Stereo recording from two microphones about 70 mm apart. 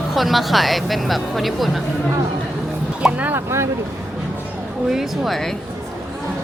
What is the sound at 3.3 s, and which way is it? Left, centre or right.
Speech, right.